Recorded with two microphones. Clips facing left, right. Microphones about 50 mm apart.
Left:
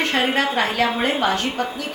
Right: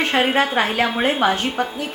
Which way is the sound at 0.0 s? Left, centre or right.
Centre.